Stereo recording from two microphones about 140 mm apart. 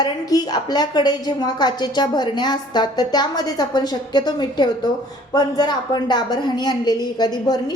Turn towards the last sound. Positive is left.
turn(degrees=30)  # may be behind; listen again after turning